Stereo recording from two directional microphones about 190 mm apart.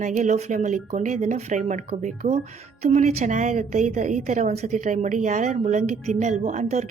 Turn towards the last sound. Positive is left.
turn(degrees=-40)  # may be behind; listen again after turning